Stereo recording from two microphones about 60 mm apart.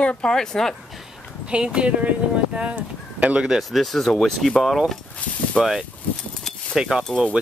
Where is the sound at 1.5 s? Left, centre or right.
Centre.